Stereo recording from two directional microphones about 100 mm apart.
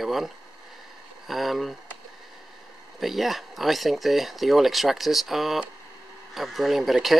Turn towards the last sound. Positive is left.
turn(degrees=0)  # may be behind; listen again after turning